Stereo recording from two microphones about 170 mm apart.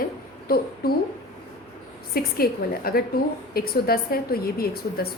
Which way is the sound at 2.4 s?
60° left (ahead or behind).